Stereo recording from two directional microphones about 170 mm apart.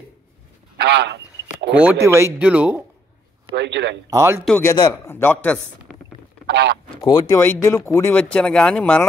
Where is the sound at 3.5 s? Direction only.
90° right.